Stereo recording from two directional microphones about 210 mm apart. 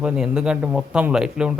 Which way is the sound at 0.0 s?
5° right (ahead or behind).